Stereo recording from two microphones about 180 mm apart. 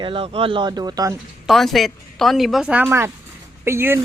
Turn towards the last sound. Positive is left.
turn(degrees=-15)  # may be behind; listen again after turning